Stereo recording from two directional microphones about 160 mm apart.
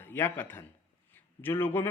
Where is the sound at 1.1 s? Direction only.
15° left (ahead or behind).